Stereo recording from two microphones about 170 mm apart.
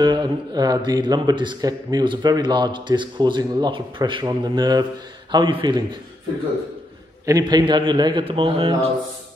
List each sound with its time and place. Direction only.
0.0 s a man's voice: 25° right (ahead or behind)
7.2 s a man's voice: 25° right (ahead or behind)